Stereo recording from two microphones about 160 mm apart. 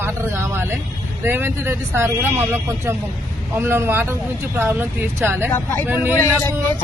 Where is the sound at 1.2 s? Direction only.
15° right (ahead or behind).